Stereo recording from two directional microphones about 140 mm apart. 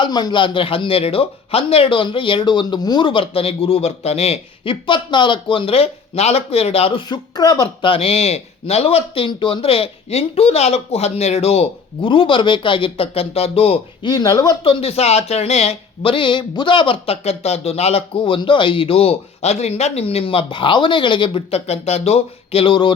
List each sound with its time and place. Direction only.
0.0 s speech: 30° left (ahead or behind)
7.1 s speech: 30° left (ahead or behind)
7.8 s speech: 40° left (ahead or behind)
14.1 s speech: 30° left (ahead or behind)